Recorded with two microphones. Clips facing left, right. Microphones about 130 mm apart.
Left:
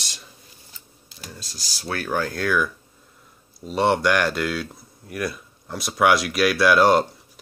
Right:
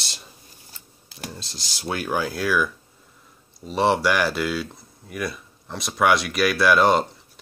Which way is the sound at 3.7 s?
Centre (ahead or behind).